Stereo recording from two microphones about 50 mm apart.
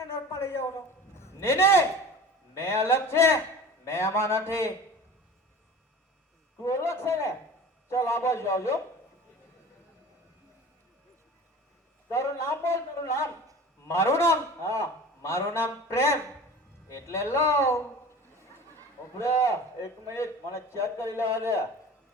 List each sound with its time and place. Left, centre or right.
0.0 s a sound: left
2.6 s a man's voice: left
6.6 s a man's voice: left
12.1 s a man's voice: left
16.9 s a man's voice: left
19.2 s a man's voice: left